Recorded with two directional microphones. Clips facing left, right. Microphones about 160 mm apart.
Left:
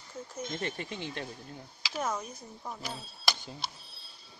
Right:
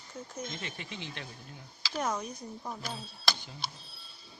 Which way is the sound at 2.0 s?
Centre (ahead or behind).